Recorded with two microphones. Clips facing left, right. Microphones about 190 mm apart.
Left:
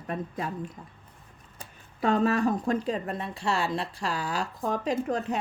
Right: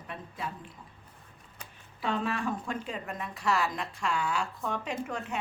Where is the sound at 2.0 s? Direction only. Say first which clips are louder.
Left 8 dB; 40° left (ahead or behind).